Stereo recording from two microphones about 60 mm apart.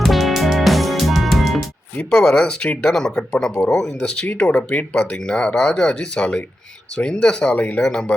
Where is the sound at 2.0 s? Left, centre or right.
Centre.